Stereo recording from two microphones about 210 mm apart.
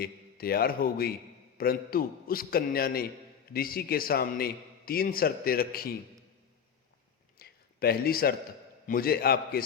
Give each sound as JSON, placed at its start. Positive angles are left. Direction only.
{"t": 0.0, "sound": "a man's voice", "side_deg": 45}
{"t": 7.3, "sound": "a sound", "side_deg": 45}
{"t": 8.9, "sound": "a man's voice", "side_deg": 45}